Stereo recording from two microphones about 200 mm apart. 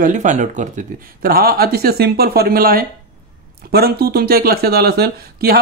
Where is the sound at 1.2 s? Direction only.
50° right (ahead or behind).